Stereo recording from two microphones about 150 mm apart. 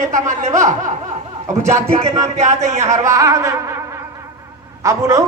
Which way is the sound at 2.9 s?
20° right (ahead or behind).